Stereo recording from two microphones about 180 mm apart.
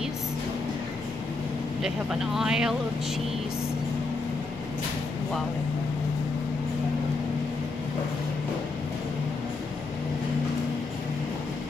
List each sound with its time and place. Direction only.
1.8 s speech: 5° right (ahead or behind)